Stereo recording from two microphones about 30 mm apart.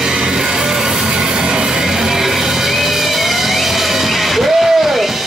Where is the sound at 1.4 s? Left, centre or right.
Right.